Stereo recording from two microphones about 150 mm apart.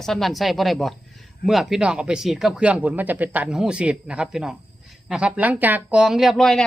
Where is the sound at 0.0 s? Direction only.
Centre (ahead or behind).